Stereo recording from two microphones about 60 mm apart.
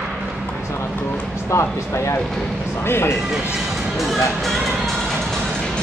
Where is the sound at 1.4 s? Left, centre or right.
Left.